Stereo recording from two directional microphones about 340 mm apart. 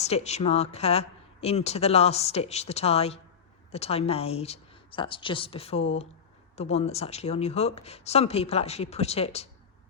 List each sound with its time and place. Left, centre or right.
0.0 s a woman's voice: centre